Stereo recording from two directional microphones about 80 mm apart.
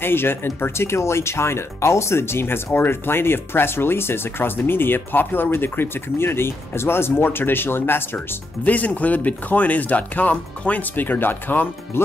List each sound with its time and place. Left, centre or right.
0.0 s speech: left